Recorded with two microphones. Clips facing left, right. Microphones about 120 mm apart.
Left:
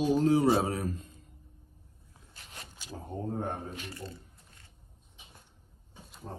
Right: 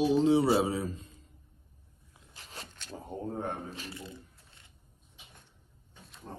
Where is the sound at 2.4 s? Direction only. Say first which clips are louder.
Right 3 dB; 35° right (ahead or behind).